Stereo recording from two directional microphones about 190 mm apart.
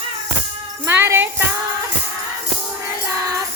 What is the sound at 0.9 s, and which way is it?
Jingle bell, 10° right (ahead or behind).